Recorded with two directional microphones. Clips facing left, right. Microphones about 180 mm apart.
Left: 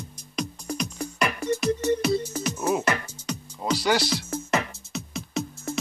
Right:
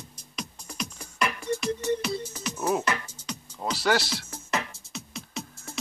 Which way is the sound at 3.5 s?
5° right (ahead or behind).